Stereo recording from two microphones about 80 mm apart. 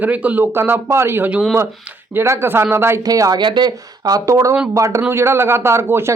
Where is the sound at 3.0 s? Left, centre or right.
Right.